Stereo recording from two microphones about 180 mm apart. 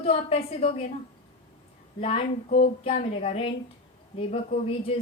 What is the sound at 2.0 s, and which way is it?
A woman's voice, 35° left (ahead or behind).